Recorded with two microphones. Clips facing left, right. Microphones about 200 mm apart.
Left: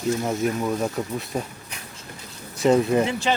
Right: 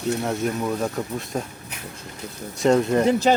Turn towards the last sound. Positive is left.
turn(degrees=-40)  # may be behind; listen again after turning